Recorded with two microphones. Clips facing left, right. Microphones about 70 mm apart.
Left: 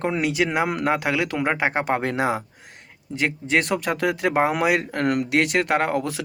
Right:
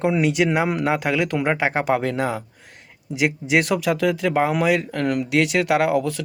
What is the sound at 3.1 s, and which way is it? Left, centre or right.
Speech, centre.